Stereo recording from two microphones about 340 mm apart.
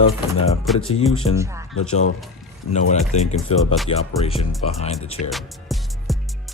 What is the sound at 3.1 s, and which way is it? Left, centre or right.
Speech, left.